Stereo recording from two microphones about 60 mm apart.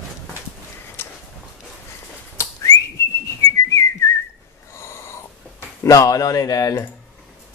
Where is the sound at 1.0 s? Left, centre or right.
Left.